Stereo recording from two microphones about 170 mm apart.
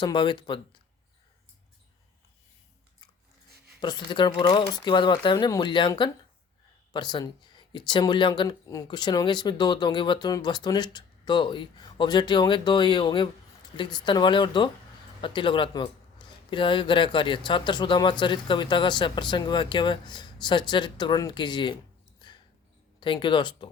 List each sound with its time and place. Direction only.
0.0 s speech: 25° left (ahead or behind)
3.8 s speech: 25° left (ahead or behind)
22.2 s a sound: 25° left (ahead or behind)
23.0 s speech: 30° left (ahead or behind)